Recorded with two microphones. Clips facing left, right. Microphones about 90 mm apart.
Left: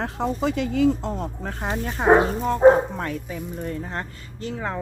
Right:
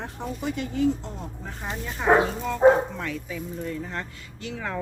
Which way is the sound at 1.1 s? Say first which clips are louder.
Left 7 dB; 80° left.